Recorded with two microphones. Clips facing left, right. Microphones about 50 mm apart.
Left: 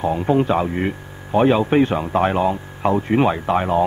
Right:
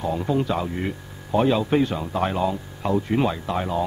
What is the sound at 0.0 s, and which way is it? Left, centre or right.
A man's voice, left.